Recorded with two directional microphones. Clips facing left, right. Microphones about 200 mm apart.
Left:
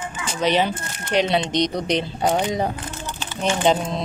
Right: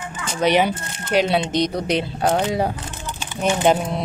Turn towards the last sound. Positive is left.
turn(degrees=-10)  # may be behind; listen again after turning